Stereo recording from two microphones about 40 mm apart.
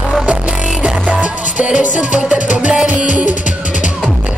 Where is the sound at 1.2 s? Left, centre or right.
Right.